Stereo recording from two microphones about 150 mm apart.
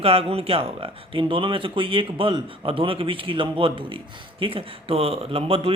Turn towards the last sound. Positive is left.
turn(degrees=-40)  # may be behind; listen again after turning